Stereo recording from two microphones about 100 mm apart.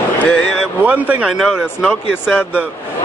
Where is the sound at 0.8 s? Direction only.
15° right (ahead or behind).